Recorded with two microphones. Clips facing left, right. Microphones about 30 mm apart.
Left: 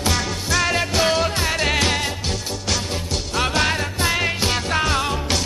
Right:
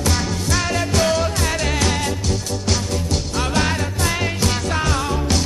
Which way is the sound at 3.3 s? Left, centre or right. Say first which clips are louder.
Left 2 dB; centre.